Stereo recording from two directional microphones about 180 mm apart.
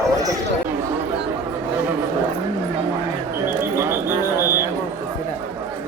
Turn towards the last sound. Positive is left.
turn(degrees=-15)  # may be behind; listen again after turning